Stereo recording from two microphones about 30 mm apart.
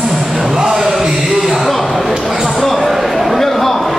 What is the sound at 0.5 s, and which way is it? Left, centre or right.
Music, right.